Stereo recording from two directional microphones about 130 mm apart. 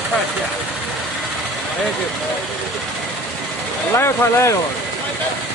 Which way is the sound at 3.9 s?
20° left (ahead or behind).